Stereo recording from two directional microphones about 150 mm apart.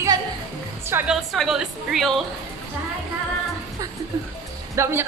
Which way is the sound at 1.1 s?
Centre (ahead or behind).